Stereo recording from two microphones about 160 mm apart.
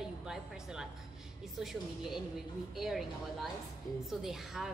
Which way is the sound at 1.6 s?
Centre (ahead or behind).